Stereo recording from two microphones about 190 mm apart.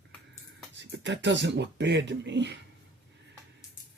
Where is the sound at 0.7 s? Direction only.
70° right (ahead or behind).